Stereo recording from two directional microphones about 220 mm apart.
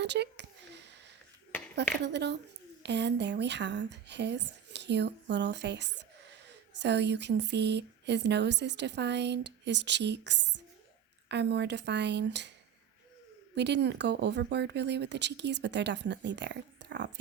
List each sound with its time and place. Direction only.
0.0 s a sound: 50° right (ahead or behind)
2.0 s speech: 50° right (ahead or behind)
13.6 s speech: 50° right (ahead or behind)